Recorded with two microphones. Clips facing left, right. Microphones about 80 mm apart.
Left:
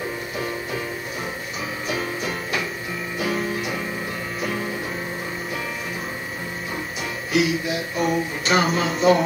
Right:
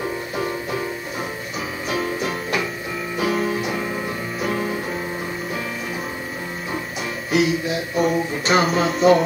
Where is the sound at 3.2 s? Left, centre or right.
Right.